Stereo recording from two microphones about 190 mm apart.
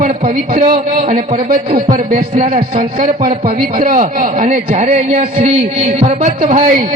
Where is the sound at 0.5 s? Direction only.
45° right (ahead or behind).